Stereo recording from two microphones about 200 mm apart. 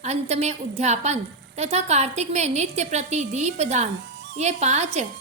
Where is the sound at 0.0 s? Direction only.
35° right (ahead or behind).